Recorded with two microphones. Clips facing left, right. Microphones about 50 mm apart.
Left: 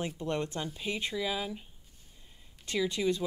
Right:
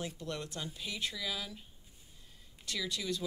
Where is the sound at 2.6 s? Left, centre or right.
Left.